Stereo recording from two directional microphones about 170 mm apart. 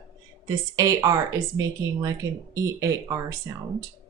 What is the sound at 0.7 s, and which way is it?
Speech, 20° right (ahead or behind).